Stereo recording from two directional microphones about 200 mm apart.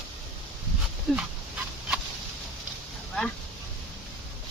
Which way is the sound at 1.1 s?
Centre (ahead or behind).